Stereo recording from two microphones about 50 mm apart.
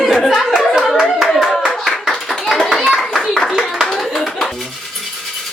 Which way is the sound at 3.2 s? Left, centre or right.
Centre.